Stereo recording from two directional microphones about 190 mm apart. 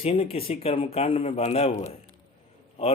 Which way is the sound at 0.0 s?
30° left (ahead or behind).